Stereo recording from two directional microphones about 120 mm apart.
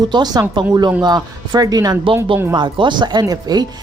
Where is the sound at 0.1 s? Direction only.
40° right (ahead or behind).